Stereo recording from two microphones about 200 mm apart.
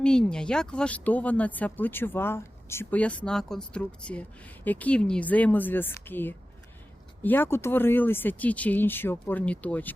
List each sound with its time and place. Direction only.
0.0 s speech: 5° left (ahead or behind)